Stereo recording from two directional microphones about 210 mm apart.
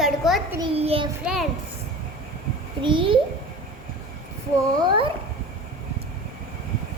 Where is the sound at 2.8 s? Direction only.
25° right (ahead or behind).